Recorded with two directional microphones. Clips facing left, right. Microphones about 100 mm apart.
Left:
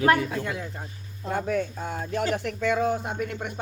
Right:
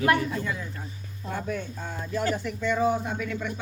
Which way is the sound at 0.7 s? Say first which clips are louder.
Even; 50° left (ahead or behind).